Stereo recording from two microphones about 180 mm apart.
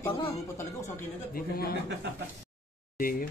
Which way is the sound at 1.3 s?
55° left (ahead or behind).